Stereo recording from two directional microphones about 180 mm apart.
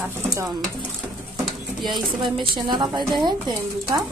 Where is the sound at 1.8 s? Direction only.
Centre (ahead or behind).